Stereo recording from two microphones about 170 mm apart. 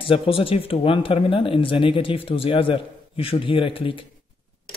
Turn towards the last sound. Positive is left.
turn(degrees=30)  # may be behind; listen again after turning